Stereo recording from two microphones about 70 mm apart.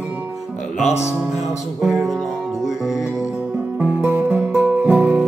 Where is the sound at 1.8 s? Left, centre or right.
Centre.